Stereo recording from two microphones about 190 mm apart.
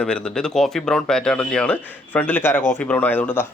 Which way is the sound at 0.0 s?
5° left (ahead or behind).